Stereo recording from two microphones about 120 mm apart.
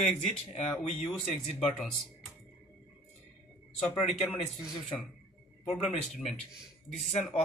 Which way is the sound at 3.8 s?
60° left (ahead or behind).